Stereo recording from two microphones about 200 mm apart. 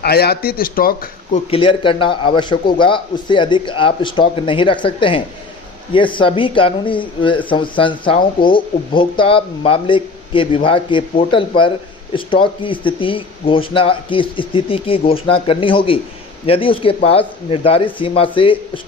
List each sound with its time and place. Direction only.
0.0 s speech: 50° left (ahead or behind)
1.5 s a man's voice: 25° left (ahead or behind)